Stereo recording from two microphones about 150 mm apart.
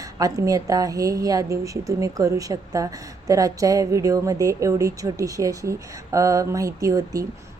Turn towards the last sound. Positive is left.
turn(degrees=-25)  # may be behind; listen again after turning